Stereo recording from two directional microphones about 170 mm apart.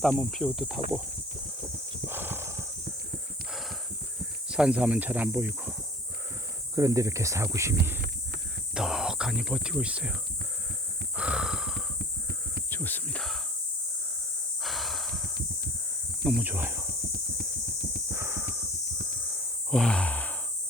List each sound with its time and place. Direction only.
0.0 s speech: 5° left (ahead or behind)
2.0 s horse: 10° right (ahead or behind)
3.5 s a sound: centre (ahead or behind)
4.4 s speech: 5° right (ahead or behind)
6.7 s speech: 20° right (ahead or behind)
8.7 s speech: 5° right (ahead or behind)
11.2 s snort: 5° right (ahead or behind)
12.7 s cricket: 10° left (ahead or behind)
14.6 s breathing: centre (ahead or behind)
16.2 s speech: 5° right (ahead or behind)
18.1 s a sound: 15° right (ahead or behind)
19.7 s sigh: 5° left (ahead or behind)